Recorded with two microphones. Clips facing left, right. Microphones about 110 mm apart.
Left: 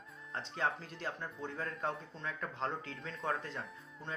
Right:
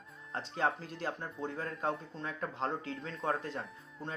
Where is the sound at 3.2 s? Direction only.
5° right (ahead or behind).